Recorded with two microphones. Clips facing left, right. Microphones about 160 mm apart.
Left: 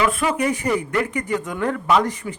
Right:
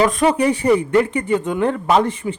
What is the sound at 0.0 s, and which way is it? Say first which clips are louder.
Speech: right 5 dB; 35° right (ahead or behind).